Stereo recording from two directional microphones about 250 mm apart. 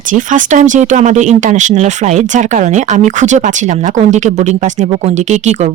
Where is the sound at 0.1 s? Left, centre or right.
Right.